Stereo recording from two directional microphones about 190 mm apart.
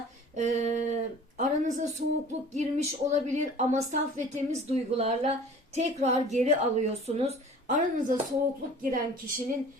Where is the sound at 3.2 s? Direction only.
40° right (ahead or behind).